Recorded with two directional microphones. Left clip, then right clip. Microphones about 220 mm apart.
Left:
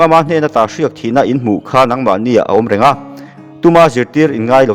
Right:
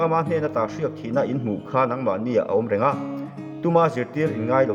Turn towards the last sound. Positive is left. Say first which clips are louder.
# left 11 dB
turn(degrees=45)  # may be behind; listen again after turning